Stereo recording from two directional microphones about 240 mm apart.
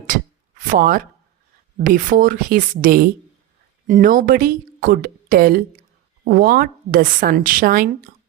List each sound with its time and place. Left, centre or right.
0.7 s a woman's voice: right